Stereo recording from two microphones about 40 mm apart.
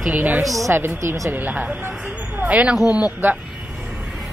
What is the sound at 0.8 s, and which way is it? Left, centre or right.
Speech, right.